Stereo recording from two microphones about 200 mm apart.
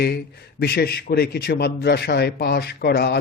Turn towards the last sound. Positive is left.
turn(degrees=55)  # may be behind; listen again after turning